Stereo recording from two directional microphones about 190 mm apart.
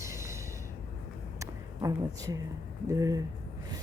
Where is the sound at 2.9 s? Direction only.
20° right (ahead or behind).